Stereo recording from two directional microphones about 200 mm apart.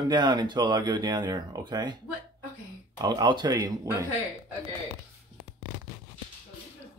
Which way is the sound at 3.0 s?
20° right (ahead or behind).